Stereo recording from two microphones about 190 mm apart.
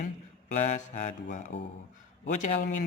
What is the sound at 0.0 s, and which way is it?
Speech, 40° left (ahead or behind).